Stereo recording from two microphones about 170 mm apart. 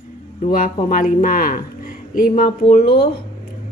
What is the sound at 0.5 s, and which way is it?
Speech, 55° left (ahead or behind).